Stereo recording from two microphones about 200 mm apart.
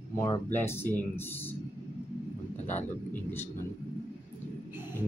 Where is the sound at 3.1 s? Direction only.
10° left (ahead or behind).